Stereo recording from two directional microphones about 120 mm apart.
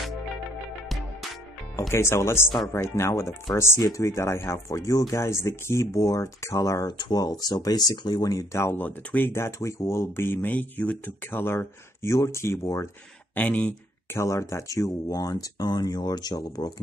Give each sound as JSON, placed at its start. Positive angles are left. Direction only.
{"t": 1.8, "sound": "speech", "side_deg": 25}
{"t": 13.3, "sound": "speech", "side_deg": 15}
{"t": 14.1, "sound": "speech", "side_deg": 25}